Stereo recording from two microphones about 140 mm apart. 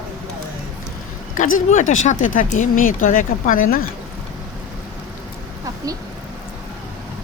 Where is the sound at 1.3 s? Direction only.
60° left (ahead or behind); by 3.8 s 75° left (ahead or behind).